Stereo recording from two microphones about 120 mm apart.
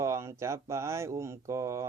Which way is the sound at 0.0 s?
25° right (ahead or behind).